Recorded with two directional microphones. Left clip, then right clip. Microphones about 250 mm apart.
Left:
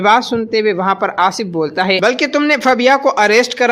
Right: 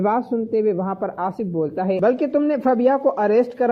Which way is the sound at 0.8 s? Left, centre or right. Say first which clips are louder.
Left 10 dB; left.